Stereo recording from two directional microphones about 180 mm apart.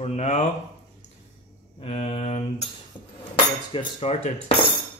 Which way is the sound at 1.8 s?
35° left (ahead or behind).